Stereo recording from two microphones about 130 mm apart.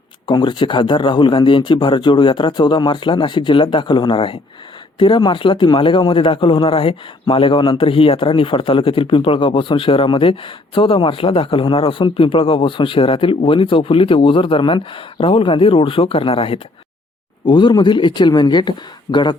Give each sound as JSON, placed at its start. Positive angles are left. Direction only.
{"t": 0.3, "sound": "a man's voice", "side_deg": 35}
{"t": 17.4, "sound": "speech", "side_deg": 35}